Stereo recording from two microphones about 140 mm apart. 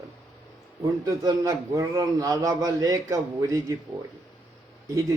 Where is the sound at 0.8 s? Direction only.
25° right (ahead or behind).